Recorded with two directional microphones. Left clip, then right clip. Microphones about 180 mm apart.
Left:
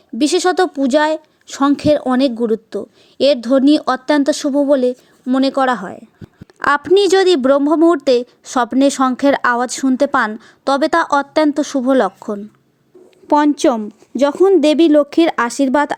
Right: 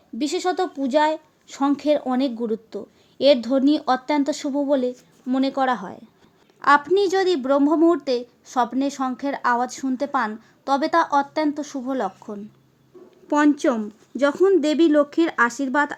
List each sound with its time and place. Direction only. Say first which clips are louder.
0.2 s speech: left 9 dB; 30° left (ahead or behind)
6.6 s a woman's voice: left 4 dB; 40° left (ahead or behind)